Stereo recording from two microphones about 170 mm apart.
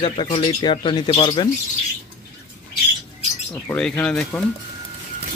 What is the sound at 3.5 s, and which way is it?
Speech, 5° left (ahead or behind).